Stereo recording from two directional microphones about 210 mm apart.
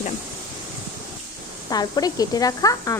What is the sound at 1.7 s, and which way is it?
Speech, 20° left (ahead or behind).